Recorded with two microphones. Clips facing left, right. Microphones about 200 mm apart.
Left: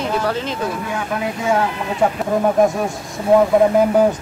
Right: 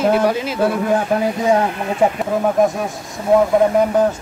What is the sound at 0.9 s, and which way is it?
Speech, 35° right (ahead or behind).